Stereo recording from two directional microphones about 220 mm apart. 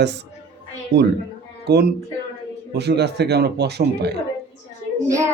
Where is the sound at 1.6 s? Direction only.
50° right (ahead or behind).